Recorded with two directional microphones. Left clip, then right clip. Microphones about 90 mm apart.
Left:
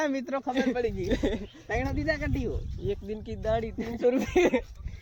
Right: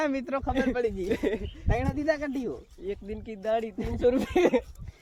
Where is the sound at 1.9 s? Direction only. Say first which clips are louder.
Right 4 dB; 60° right (ahead or behind).